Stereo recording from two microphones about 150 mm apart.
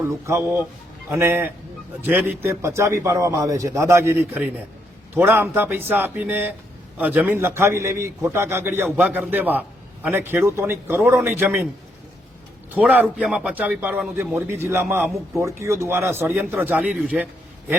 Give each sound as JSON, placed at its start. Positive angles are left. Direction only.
{"t": 0.0, "sound": "a man's voice", "side_deg": -15}
{"t": 12.7, "sound": "a man's voice", "side_deg": -10}